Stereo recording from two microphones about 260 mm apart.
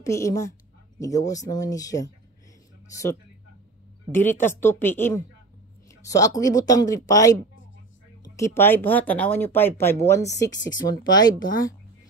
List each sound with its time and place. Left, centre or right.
0.0 s speech: centre